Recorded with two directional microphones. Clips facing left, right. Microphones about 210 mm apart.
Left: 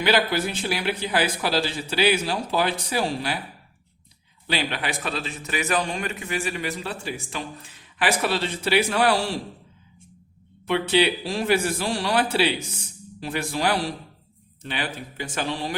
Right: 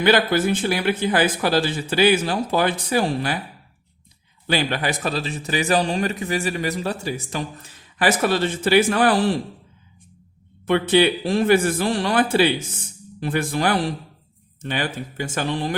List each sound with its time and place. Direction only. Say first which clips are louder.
0.0 s speech: right 4 dB; 50° right (ahead or behind)
4.4 s a man's voice: right 5 dB; 45° right (ahead or behind)
10.7 s speech: right 4 dB; 50° right (ahead or behind)